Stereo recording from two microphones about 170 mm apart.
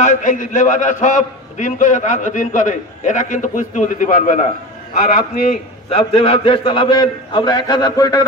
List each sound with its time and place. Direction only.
0.0 s a man's voice: 50° left (ahead or behind); by 8.3 s 20° left (ahead or behind)